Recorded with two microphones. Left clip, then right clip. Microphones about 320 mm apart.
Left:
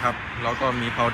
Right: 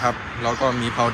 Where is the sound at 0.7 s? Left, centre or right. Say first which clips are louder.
Right 2 dB; right.